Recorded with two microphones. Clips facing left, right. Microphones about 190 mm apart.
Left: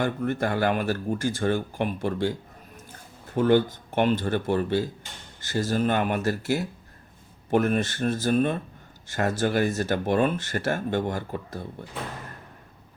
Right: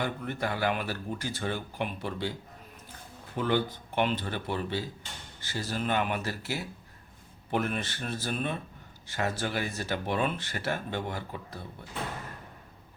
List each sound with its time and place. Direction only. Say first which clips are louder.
0.0 s speech: left 7 dB; 50° left (ahead or behind)
3.3 s speech: left 8 dB; 45° left (ahead or behind)